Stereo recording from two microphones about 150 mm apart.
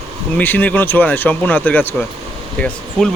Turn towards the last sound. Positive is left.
turn(degrees=0)  # may be behind; listen again after turning